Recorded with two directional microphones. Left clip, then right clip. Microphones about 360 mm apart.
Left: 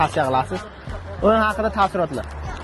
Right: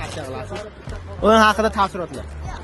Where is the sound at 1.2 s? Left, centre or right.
Centre.